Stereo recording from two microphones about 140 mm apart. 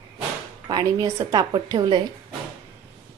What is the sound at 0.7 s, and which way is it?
Speech, 25° right (ahead or behind).